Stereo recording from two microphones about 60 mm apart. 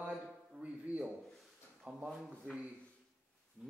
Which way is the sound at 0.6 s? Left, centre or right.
Right.